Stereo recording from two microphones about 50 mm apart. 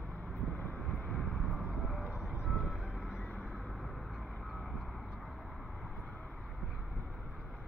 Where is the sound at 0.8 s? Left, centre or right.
Centre.